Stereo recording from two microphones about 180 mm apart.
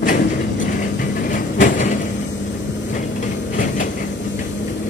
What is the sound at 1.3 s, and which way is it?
Train, 50° left (ahead or behind).